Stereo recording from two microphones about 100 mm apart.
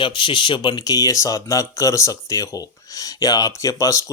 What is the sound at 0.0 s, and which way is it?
Speech, 55° left (ahead or behind).